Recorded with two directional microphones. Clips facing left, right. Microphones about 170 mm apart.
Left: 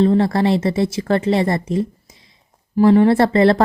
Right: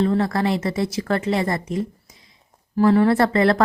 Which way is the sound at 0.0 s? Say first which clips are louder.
Left 5 dB; 25° left (ahead or behind).